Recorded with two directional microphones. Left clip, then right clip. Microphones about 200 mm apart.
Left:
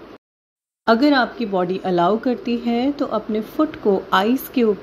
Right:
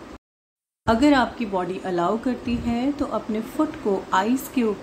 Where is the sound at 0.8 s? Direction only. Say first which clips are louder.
Left 3 dB; 15° left (ahead or behind).